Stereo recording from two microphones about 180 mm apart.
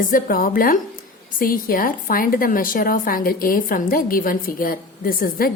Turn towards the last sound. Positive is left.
turn(degrees=55)  # may be behind; listen again after turning